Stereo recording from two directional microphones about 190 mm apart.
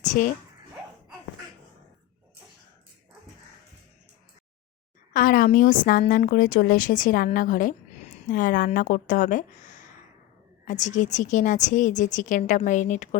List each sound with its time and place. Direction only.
0.0 s dog: 40° left (ahead or behind)
5.1 s a woman's voice: 45° left (ahead or behind)